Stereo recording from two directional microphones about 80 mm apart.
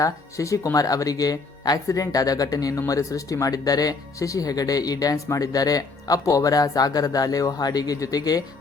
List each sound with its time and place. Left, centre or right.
0.0 s speech: left